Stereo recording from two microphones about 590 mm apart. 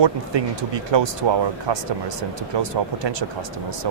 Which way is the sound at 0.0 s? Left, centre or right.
Right.